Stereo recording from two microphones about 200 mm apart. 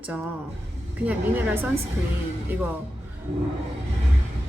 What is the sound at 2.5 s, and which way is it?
Speech, 10° right (ahead or behind).